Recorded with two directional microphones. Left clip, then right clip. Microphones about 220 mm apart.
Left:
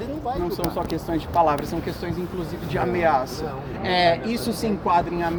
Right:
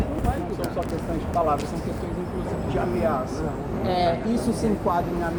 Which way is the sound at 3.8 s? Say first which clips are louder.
Left 4 dB; 25° left (ahead or behind).